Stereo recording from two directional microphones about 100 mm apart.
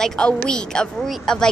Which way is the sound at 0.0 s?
5° left (ahead or behind).